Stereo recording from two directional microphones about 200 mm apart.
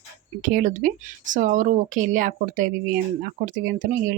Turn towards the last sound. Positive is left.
turn(degrees=-40)  # may be behind; listen again after turning